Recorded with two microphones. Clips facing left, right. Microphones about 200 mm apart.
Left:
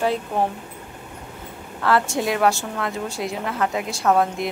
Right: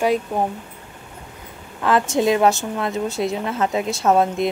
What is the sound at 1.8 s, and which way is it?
A woman's voice, 20° right (ahead or behind).